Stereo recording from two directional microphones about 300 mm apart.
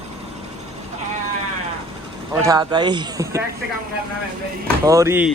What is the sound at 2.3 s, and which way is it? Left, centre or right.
A man's voice, centre.